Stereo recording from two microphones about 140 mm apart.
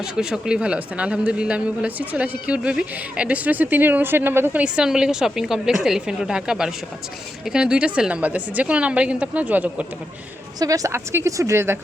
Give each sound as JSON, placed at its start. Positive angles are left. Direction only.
{"t": 0.0, "sound": "speech", "side_deg": -5}
{"t": 10.6, "sound": "a woman's voice", "side_deg": -25}